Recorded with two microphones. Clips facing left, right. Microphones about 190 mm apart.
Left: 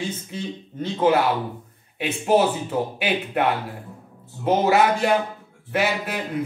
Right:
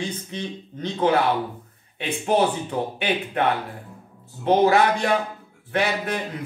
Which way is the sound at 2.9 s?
5° left (ahead or behind).